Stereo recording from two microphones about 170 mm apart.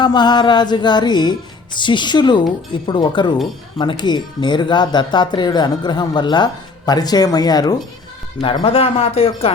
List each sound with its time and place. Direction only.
0.0 s speech: 25° left (ahead or behind)